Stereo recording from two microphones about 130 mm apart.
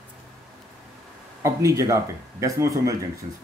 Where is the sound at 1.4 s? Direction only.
25° right (ahead or behind).